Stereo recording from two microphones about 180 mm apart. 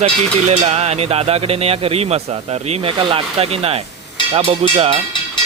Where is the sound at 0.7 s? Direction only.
35° right (ahead or behind).